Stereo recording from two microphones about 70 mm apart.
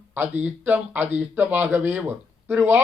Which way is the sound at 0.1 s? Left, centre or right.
Right.